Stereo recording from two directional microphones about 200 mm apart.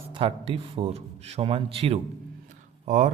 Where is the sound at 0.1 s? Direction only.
25° right (ahead or behind).